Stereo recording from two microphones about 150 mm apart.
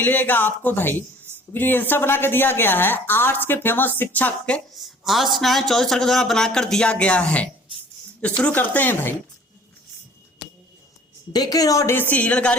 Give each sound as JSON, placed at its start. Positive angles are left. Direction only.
{"t": 0.0, "sound": "a woman's voice", "side_deg": 10}
{"t": 11.3, "sound": "a woman's voice", "side_deg": 25}